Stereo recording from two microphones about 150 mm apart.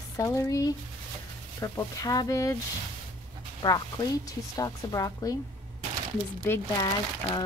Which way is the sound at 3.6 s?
30° left (ahead or behind).